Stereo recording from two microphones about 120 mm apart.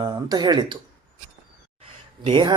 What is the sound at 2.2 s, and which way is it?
Speech, 40° right (ahead or behind).